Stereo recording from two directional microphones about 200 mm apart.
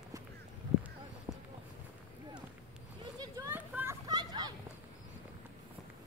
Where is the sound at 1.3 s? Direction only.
10° right (ahead or behind).